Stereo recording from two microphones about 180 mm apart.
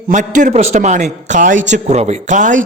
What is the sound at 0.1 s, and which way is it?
Speech, 45° right (ahead or behind).